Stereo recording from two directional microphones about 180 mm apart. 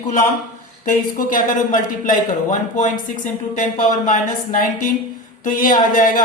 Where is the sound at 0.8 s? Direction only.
45° left (ahead or behind).